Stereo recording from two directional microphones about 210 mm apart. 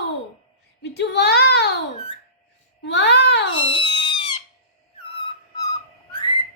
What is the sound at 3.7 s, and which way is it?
Cat, 20° left (ahead or behind).